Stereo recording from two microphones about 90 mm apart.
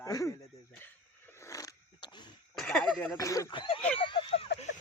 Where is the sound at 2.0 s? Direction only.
55° left (ahead or behind).